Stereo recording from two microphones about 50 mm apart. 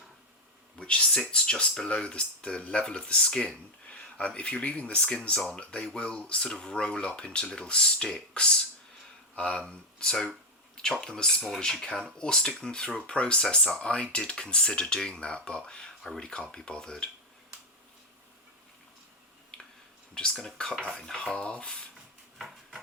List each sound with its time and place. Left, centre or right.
0.8 s speech: centre
3.4 s a sound: left
4.4 s speech: left
19.5 s finger snapping: centre
20.4 s speech: centre
20.7 s speech: centre
21.2 s speech: centre
22.4 s dishes: centre